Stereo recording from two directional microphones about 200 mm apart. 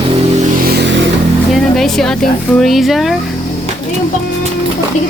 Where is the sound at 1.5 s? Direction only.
Centre (ahead or behind).